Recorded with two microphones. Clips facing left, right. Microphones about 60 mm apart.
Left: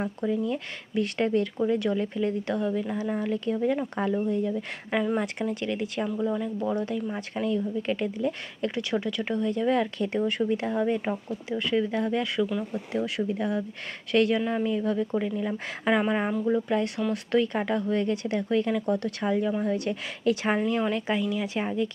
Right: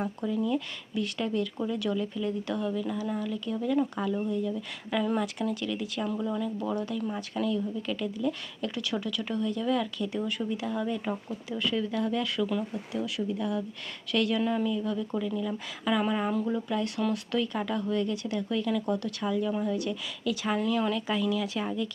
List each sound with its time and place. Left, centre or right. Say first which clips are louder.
0.0 s speech: left 2 dB; left
6.1 s speech: left 1 dB; centre
6.7 s speech: left 2 dB; left
12.4 s speech: left 1 dB; centre
12.9 s speech: left 5 dB; left
19.6 s speech: left 3 dB; left
20.6 s speech: left 2 dB; left